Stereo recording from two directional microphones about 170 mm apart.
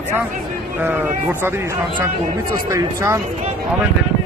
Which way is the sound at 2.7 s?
15° right (ahead or behind).